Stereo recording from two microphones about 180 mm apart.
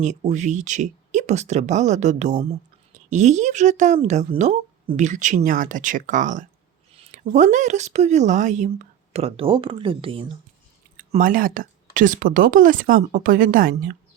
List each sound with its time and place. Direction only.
0.0 s a woman's voice: 40° right (ahead or behind)
11.1 s a woman's voice: 50° right (ahead or behind)